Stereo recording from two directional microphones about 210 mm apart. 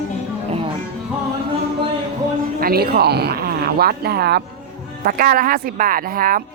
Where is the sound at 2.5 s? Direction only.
45° right (ahead or behind).